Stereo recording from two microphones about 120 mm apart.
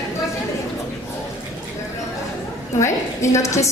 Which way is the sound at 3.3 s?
25° left (ahead or behind).